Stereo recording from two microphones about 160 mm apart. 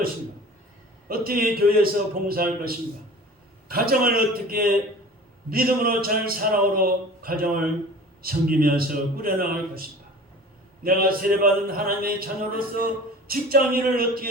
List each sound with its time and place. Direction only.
1.0 s a man's voice: 70° right (ahead or behind)
10.8 s speech: 65° right (ahead or behind)